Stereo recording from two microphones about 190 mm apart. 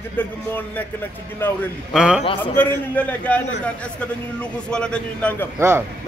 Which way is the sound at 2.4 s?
10° left (ahead or behind).